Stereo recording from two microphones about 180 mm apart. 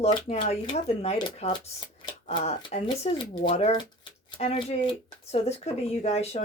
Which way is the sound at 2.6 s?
25° left (ahead or behind).